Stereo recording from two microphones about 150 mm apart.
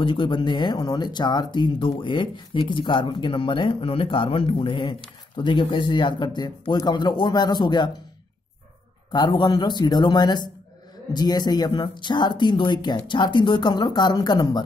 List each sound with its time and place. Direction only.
0.0 s speech: 35° left (ahead or behind)
9.1 s speech: 30° left (ahead or behind)